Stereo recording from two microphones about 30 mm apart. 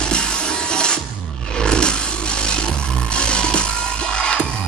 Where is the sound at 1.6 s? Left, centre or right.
Left.